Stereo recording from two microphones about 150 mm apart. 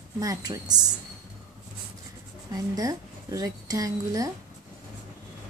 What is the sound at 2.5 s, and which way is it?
A woman's voice, 25° right (ahead or behind).